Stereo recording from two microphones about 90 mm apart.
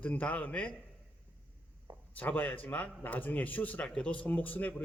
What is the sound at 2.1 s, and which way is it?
A man's voice, 20° left (ahead or behind).